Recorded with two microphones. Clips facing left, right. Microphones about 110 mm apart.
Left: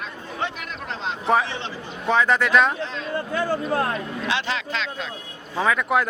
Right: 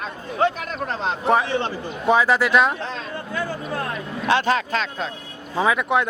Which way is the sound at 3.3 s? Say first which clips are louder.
Left 4 dB; 40° left (ahead or behind).